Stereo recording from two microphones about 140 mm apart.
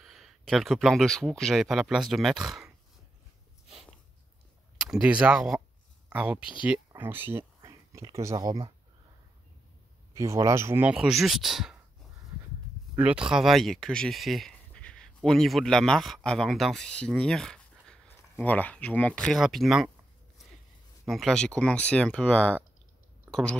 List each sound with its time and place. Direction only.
0.0 s speech: centre (ahead or behind)
4.9 s speech: 10° right (ahead or behind); by 8.5 s 25° right (ahead or behind)
10.1 s speech: 20° right (ahead or behind)
11.0 s speech: centre (ahead or behind)
13.3 s speech: centre (ahead or behind)
21.0 s speech: centre (ahead or behind)